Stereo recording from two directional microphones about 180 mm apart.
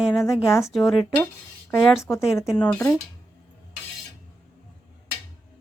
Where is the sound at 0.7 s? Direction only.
Centre (ahead or behind).